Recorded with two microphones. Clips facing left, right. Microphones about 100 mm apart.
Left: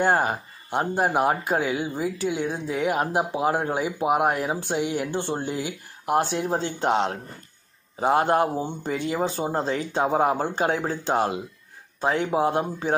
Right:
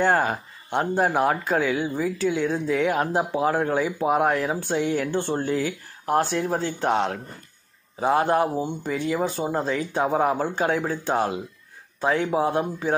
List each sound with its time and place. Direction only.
0.1 s speech: 20° left (ahead or behind)